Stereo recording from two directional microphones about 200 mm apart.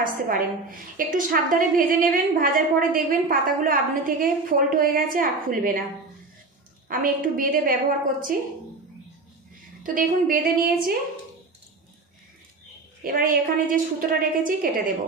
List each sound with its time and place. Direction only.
0.0 s a woman's voice: 45° right (ahead or behind)
6.9 s a woman's voice: 45° right (ahead or behind)
9.9 s a woman's voice: 45° right (ahead or behind)
13.0 s a woman's voice: 45° right (ahead or behind)